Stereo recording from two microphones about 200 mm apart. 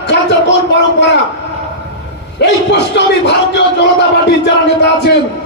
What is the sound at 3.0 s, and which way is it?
A man's voice, 60° left (ahead or behind).